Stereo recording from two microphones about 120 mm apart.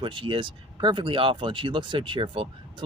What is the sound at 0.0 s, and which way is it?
Speech, 45° right (ahead or behind).